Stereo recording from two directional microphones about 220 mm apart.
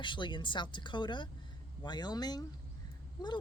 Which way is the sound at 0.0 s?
20° left (ahead or behind).